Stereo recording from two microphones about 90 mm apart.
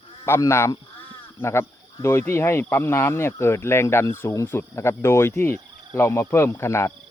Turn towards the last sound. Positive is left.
turn(degrees=30)  # may be behind; listen again after turning